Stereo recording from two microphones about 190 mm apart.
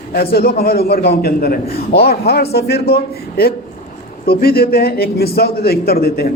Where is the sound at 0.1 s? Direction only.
55° left (ahead or behind).